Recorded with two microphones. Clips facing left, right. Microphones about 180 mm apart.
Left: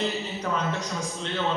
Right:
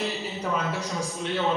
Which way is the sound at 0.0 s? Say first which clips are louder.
Left 1 dB; centre (ahead or behind).